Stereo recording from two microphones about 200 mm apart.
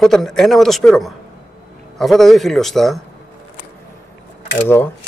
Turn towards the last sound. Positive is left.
turn(degrees=10)  # may be behind; listen again after turning